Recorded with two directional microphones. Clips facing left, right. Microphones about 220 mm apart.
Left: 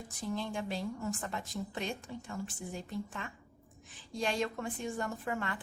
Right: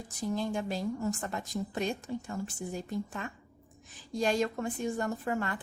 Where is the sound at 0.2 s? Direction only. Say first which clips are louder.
Right 5 dB; 40° right (ahead or behind).